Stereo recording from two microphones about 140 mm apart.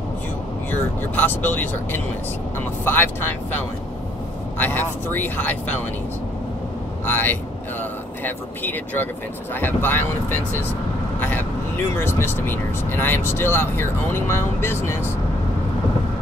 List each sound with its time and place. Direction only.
0.7 s speech: 15° left (ahead or behind)
7.1 s speech: 15° left (ahead or behind)
11.1 s vehicle: 15° left (ahead or behind)
11.9 s speech: 15° left (ahead or behind)